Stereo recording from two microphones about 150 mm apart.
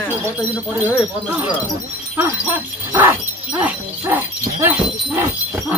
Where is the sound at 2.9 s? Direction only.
15° right (ahead or behind).